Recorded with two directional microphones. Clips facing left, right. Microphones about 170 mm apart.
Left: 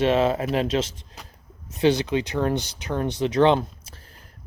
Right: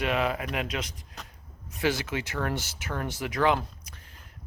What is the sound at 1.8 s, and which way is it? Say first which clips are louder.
Speech: left 8 dB; 20° left (ahead or behind).